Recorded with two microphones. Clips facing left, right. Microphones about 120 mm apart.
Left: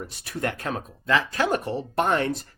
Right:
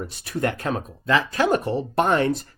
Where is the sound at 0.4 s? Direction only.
25° right (ahead or behind).